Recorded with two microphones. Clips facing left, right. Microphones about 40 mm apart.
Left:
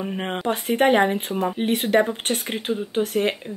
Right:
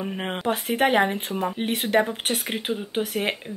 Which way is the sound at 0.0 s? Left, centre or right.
Centre.